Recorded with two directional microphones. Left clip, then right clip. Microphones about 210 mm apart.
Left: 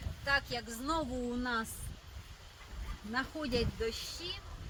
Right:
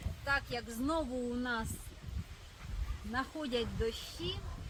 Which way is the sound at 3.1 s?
25° left (ahead or behind).